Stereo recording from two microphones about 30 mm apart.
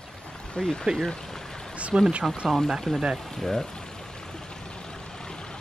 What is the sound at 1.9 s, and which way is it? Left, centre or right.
Speech, right.